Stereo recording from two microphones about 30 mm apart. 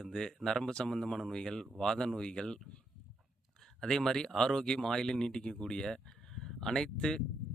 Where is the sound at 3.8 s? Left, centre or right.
Left.